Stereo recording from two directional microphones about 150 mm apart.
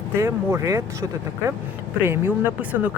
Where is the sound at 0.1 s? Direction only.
15° right (ahead or behind).